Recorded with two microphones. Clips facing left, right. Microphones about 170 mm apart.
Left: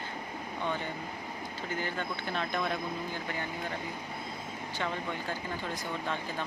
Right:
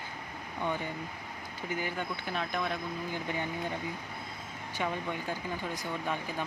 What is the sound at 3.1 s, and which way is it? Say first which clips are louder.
Speech: right 2 dB; 15° right (ahead or behind).